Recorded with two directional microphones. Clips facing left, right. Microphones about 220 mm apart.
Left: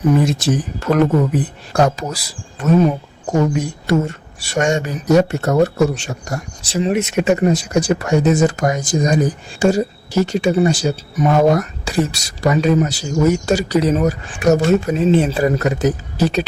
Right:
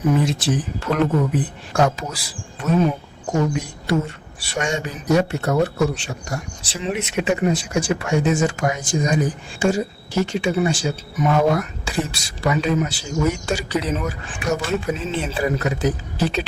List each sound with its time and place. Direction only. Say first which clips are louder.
0.2 s speech: left 4 dB; 45° left (ahead or behind)
3.8 s speech: left 3 dB; 45° left (ahead or behind)